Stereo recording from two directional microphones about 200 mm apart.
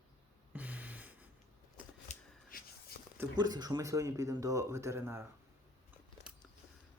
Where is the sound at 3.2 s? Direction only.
20° right (ahead or behind).